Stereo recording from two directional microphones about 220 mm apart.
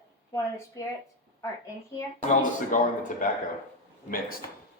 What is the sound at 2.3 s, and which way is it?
Speech, 35° left (ahead or behind).